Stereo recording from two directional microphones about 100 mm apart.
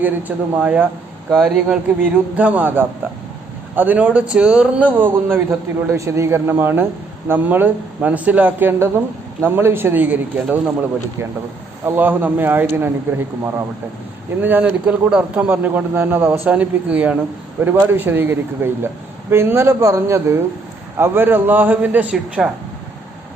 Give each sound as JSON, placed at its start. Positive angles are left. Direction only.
{"t": 0.0, "sound": "speech", "side_deg": -15}
{"t": 1.3, "sound": "speech", "side_deg": 5}
{"t": 1.6, "sound": "speech", "side_deg": -15}
{"t": 11.9, "sound": "speech", "side_deg": -20}